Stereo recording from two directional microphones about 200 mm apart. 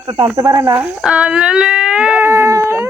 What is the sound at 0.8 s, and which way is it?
Speech, 5° right (ahead or behind).